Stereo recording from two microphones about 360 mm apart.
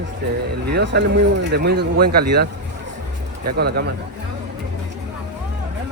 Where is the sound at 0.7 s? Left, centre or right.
Right.